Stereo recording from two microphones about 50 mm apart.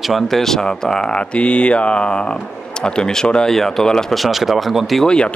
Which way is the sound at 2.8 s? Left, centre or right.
Centre.